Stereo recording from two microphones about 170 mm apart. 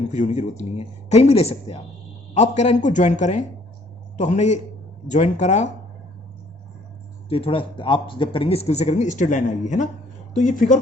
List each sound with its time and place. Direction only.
0.1 s speech: 45° left (ahead or behind)
7.3 s speech: 35° left (ahead or behind)